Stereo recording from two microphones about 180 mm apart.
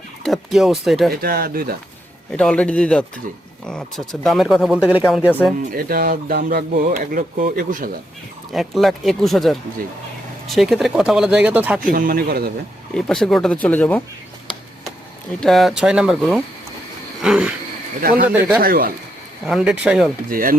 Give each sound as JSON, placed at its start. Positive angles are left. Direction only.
{"t": 0.2, "sound": "speech", "side_deg": 0}
{"t": 1.2, "sound": "speech", "side_deg": -60}
{"t": 2.3, "sound": "speech", "side_deg": 5}
{"t": 5.7, "sound": "speech", "side_deg": -55}
{"t": 8.5, "sound": "speech", "side_deg": 0}
{"t": 11.8, "sound": "speech", "side_deg": -50}
{"t": 12.9, "sound": "speech", "side_deg": 5}
{"t": 15.4, "sound": "speech", "side_deg": 0}
{"t": 18.0, "sound": "speech", "side_deg": -50}
{"t": 18.3, "sound": "speech", "side_deg": -5}
{"t": 18.6, "sound": "speech", "side_deg": -55}
{"t": 19.5, "sound": "speech", "side_deg": -5}
{"t": 20.3, "sound": "speech", "side_deg": -50}